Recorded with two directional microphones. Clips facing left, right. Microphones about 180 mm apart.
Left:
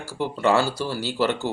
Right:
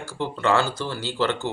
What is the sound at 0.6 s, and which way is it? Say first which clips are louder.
Speech: left 2 dB; 20° right (ahead or behind).